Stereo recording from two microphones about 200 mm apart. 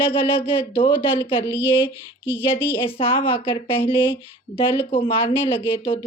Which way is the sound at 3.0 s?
25° left (ahead or behind).